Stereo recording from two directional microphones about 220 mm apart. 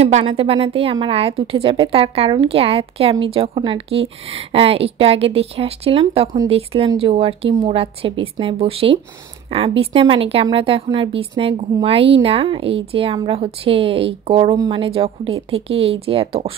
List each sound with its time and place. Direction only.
0.0 s a woman's voice: 30° right (ahead or behind)